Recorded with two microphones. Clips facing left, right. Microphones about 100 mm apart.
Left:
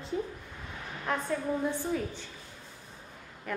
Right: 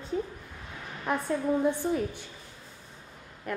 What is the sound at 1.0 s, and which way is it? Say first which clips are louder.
A woman's voice: right 3 dB; 15° right (ahead or behind).